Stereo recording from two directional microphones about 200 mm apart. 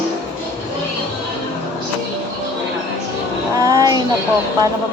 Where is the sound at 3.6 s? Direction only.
15° right (ahead or behind).